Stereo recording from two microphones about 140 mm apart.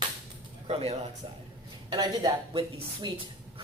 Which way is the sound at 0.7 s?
45° right (ahead or behind).